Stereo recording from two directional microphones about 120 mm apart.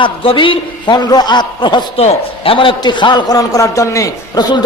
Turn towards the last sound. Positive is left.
turn(degrees=35)  # may be behind; listen again after turning